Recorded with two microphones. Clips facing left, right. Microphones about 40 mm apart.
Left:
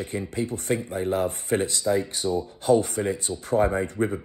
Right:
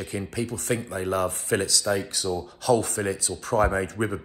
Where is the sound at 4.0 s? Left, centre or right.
Right.